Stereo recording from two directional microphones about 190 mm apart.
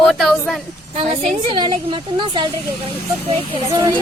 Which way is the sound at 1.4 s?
25° right (ahead or behind).